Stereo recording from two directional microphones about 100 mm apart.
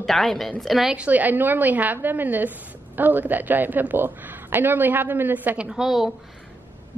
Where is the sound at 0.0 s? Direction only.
5° left (ahead or behind).